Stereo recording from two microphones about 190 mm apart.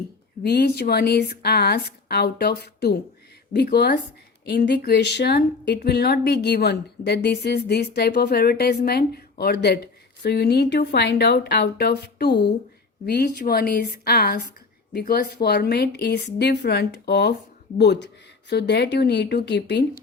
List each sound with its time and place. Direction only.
0.4 s speech: 60° left (ahead or behind)